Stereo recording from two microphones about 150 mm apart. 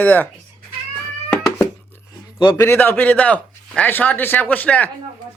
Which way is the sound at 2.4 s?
30° left (ahead or behind).